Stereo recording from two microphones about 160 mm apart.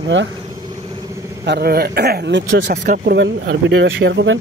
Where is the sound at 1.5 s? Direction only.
75° right (ahead or behind).